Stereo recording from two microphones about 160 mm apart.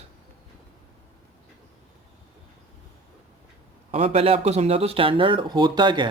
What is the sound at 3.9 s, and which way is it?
Speech, 40° right (ahead or behind).